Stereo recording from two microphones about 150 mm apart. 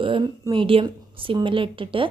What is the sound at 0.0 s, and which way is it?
A woman's voice, 35° right (ahead or behind).